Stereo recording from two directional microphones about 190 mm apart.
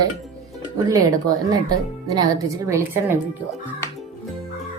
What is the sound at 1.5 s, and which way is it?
A woman's voice, 20° right (ahead or behind).